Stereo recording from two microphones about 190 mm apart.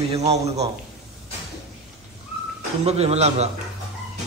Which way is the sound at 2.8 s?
35° right (ahead or behind).